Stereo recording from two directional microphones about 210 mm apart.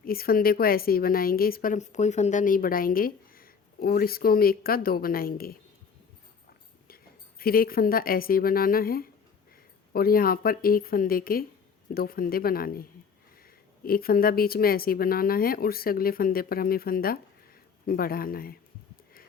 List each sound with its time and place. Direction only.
0.0 s a woman's voice: 45° left (ahead or behind)
6.8 s a woman's voice: 45° left (ahead or behind)